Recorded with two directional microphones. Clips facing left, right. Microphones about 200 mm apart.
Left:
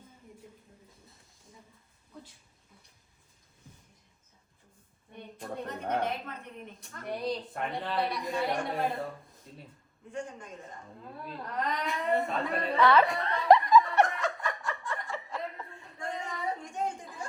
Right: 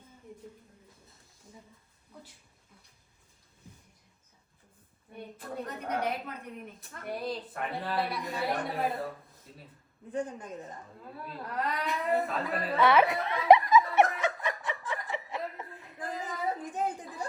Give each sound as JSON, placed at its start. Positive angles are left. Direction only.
{"t": 6.1, "sound": "a woman's voice", "side_deg": -5}
{"t": 10.1, "sound": "a man's voice", "side_deg": -35}
{"t": 11.2, "sound": "a sound", "side_deg": -5}